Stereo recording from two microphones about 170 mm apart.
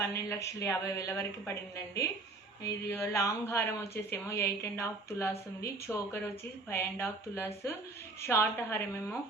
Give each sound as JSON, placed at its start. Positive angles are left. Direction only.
{"t": 0.1, "sound": "a woman's voice", "side_deg": 15}